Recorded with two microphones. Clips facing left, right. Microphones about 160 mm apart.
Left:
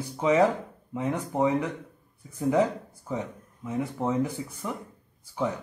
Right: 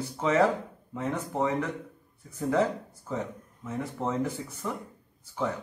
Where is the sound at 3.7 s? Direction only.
10° left (ahead or behind).